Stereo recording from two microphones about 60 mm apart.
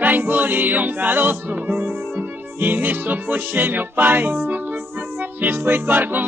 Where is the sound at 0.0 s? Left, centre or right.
Right.